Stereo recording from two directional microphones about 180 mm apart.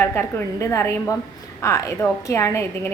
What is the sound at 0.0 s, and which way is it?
A woman's voice, 10° left (ahead or behind).